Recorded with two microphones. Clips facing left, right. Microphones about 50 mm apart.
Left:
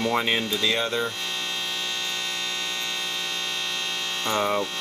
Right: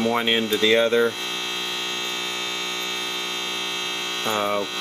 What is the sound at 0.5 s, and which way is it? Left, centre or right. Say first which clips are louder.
Speech: right 7 dB; right.